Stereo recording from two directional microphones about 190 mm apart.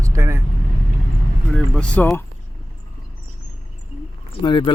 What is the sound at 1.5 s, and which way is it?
Speech, 5° left (ahead or behind).